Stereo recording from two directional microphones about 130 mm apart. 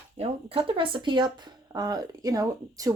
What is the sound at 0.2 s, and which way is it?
Speech, 45° right (ahead or behind).